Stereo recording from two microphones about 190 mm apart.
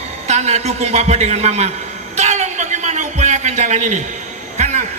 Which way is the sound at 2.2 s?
40° right (ahead or behind).